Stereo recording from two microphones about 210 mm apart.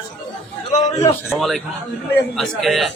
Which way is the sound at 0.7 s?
30° left (ahead or behind).